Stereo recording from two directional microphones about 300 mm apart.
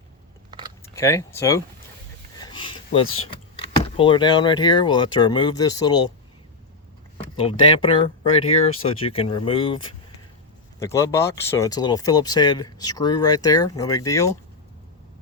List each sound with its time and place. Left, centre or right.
0.9 s speech: centre
2.4 s a sound: centre
3.5 s speech: centre
7.3 s speech: centre